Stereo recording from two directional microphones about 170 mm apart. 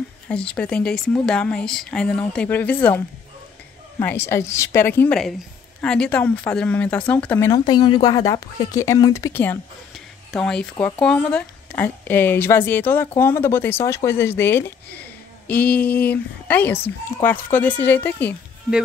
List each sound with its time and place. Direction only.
0.3 s speech: 5° left (ahead or behind)
4.0 s speech: 15° left (ahead or behind)
9.9 s a sound: 5° left (ahead or behind)
11.0 s speech: 5° left (ahead or behind)